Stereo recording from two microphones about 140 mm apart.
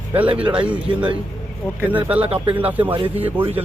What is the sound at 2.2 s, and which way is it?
Speech, 40° right (ahead or behind).